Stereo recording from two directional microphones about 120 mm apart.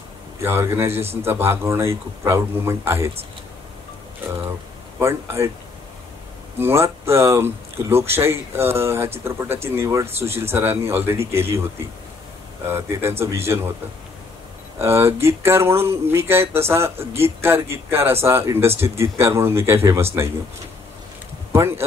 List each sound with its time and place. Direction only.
0.4 s speech: 20° right (ahead or behind)
4.9 s speech: 20° right (ahead or behind)
6.6 s speech: 20° right (ahead or behind)
12.6 s speech: 20° right (ahead or behind)
14.8 s speech: 20° right (ahead or behind)
21.5 s speech: 20° right (ahead or behind)